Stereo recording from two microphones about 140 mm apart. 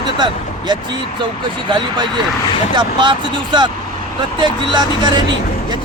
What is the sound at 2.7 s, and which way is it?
Speech, 35° right (ahead or behind).